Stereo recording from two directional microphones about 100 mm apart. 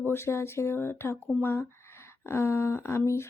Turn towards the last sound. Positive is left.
turn(degrees=30)  # may be behind; listen again after turning